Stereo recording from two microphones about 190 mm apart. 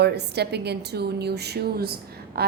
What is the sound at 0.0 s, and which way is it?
A woman's voice, 60° right (ahead or behind).